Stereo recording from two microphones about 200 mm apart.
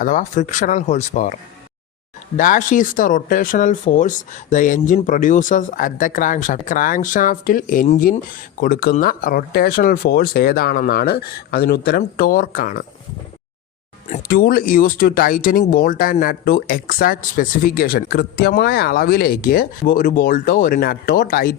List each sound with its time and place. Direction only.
0.0 s speech: 40° left (ahead or behind)
14.1 s speech: 45° left (ahead or behind)